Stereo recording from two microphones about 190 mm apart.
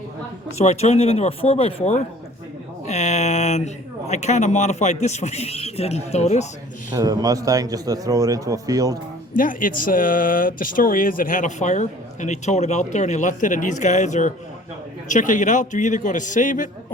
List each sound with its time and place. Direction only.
0.6 s speech: 35° left (ahead or behind)
6.9 s a man's voice: 20° right (ahead or behind)
9.3 s speech: 45° left (ahead or behind)